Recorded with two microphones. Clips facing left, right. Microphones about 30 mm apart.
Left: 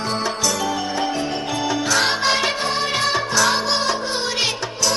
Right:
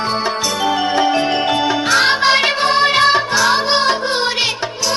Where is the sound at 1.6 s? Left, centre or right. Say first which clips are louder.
Right 3 dB; right.